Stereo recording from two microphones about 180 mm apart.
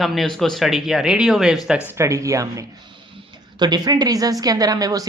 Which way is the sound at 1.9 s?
15° right (ahead or behind).